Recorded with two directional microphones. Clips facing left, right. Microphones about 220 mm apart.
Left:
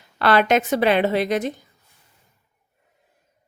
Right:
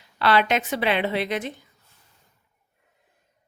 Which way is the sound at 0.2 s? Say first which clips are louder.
Left 4 dB; 50° left (ahead or behind).